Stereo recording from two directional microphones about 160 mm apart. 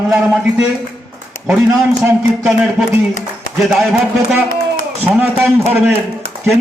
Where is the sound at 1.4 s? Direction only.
10° right (ahead or behind).